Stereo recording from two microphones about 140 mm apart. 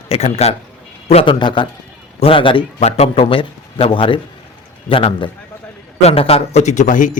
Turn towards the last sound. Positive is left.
turn(degrees=65)  # may be behind; listen again after turning